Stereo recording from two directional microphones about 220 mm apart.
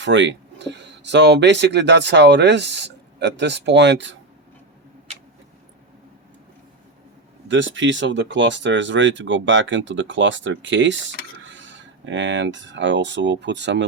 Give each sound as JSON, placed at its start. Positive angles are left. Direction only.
{"t": 0.0, "sound": "speech", "side_deg": -55}
{"t": 7.4, "sound": "speech", "side_deg": -55}